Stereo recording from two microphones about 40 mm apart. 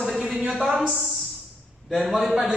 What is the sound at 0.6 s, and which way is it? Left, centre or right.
Speech, centre.